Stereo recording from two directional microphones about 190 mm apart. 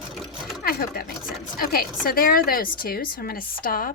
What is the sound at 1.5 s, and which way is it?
A woman's voice, 50° left (ahead or behind).